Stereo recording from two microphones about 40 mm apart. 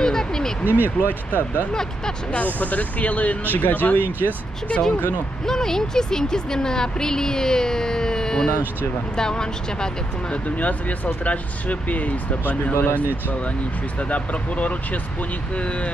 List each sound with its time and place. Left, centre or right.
0.0 s quack: centre
0.7 s speech: right
1.0 s speech: left
1.7 s speech: centre
2.3 s speech: left
5.5 s speech: centre
10.3 s speech: left
12.8 s speech: left
14.0 s speech: left